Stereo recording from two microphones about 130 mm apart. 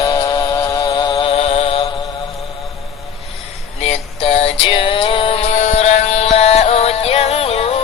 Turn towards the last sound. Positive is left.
turn(degrees=55)  # may be behind; listen again after turning